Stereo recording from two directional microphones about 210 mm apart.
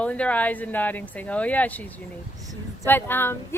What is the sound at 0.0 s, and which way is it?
Speech, 5° left (ahead or behind).